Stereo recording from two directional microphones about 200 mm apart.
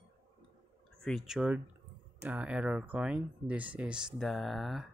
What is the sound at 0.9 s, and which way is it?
Speech, centre (ahead or behind).